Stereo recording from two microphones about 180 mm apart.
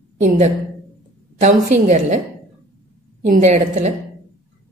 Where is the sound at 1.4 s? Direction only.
40° right (ahead or behind).